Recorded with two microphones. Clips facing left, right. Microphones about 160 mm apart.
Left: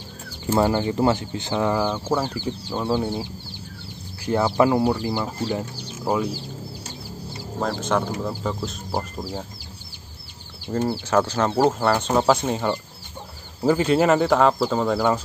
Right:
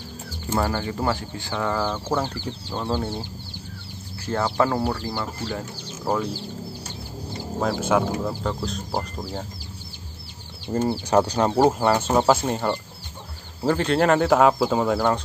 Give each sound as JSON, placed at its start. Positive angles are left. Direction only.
{"t": 0.5, "sound": "speech", "side_deg": 20}
{"t": 4.3, "sound": "speech", "side_deg": 15}
{"t": 7.6, "sound": "speech", "side_deg": -5}
{"t": 10.9, "sound": "speech", "side_deg": -15}